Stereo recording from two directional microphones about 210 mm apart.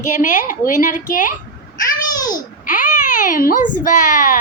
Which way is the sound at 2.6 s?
40° left (ahead or behind).